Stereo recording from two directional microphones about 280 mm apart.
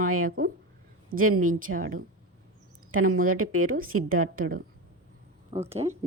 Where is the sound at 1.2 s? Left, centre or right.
Right.